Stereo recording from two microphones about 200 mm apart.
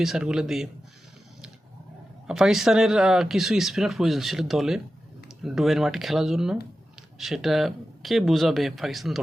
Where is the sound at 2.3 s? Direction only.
Centre (ahead or behind).